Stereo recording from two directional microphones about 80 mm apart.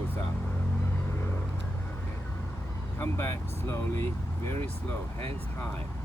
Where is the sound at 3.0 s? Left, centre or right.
Left.